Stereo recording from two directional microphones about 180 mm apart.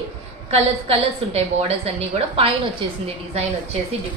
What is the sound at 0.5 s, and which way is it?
A woman's voice, 35° right (ahead or behind).